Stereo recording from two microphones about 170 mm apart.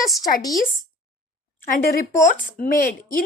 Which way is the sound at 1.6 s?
55° left (ahead or behind).